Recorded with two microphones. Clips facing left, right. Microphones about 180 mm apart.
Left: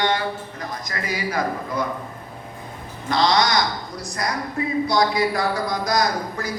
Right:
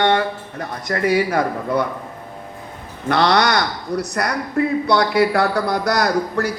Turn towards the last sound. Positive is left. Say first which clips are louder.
# right 5 dB
turn(degrees=-65)  # may be behind; listen again after turning